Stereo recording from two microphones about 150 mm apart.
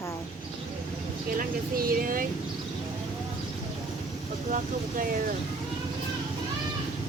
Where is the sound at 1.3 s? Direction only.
70° right (ahead or behind).